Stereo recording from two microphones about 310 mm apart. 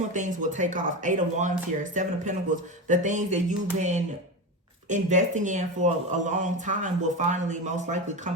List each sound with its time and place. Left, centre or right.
0.1 s a man's voice: right